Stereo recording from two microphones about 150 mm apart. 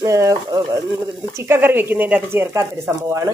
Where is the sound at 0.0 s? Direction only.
20° right (ahead or behind).